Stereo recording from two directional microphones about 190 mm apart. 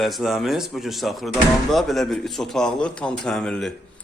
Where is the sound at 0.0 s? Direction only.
Centre (ahead or behind).